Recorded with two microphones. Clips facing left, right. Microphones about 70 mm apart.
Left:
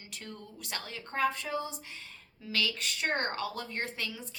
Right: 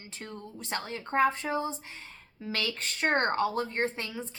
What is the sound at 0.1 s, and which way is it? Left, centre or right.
A woman's voice, right.